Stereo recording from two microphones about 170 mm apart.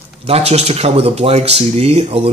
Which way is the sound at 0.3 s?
40° right (ahead or behind).